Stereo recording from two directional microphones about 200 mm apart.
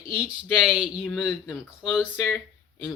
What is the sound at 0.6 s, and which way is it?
Speech, 5° right (ahead or behind).